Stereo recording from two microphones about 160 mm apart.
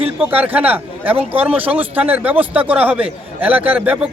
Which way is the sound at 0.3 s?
10° right (ahead or behind).